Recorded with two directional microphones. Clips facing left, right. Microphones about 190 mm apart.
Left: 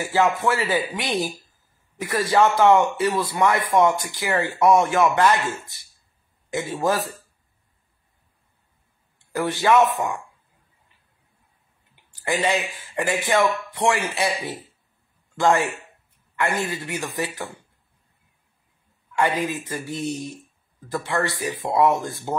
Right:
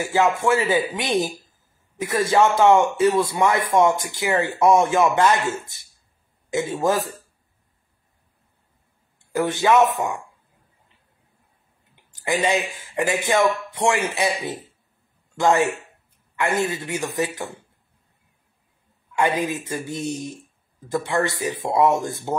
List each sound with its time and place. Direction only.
0.0 s a man's voice: 15° right (ahead or behind)
9.3 s a man's voice: 20° right (ahead or behind)
11.9 s a man's voice: 20° right (ahead or behind)
19.1 s a man's voice: 15° right (ahead or behind)